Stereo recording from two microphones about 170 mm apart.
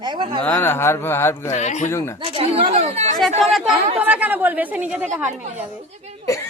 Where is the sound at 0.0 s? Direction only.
25° right (ahead or behind).